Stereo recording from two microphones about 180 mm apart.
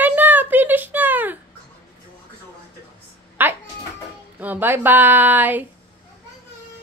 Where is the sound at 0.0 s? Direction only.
10° right (ahead or behind).